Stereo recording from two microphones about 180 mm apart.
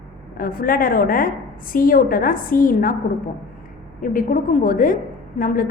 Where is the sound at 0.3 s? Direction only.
55° left (ahead or behind).